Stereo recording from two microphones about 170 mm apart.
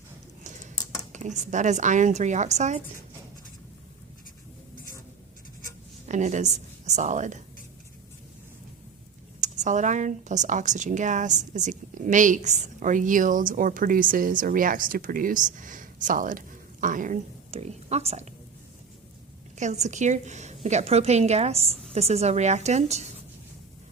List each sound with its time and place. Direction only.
1.1 s a woman's voice: 45° right (ahead or behind)
6.1 s a woman's voice: 45° right (ahead or behind)
9.4 s a woman's voice: 45° right (ahead or behind)
19.5 s a woman's voice: 45° right (ahead or behind)